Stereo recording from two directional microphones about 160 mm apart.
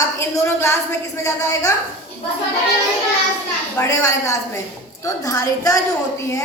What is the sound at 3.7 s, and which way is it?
A woman's voice, 20° left (ahead or behind).